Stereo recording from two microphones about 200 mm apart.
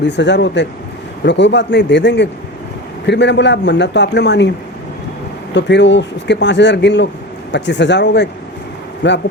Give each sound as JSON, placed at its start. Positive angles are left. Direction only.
{"t": 0.0, "sound": "speech", "side_deg": 60}
{"t": 5.5, "sound": "speech", "side_deg": 60}